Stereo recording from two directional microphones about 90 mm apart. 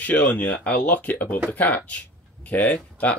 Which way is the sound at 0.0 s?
20° left (ahead or behind).